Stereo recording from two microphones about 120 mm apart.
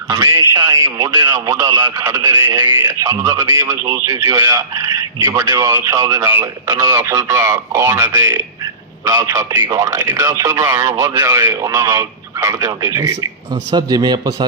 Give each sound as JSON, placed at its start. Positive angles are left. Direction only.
{"t": 0.1, "sound": "speech", "side_deg": -30}
{"t": 1.2, "sound": "speech", "side_deg": -25}